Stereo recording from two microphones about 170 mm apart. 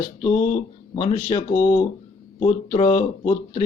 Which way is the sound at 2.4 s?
35° left (ahead or behind).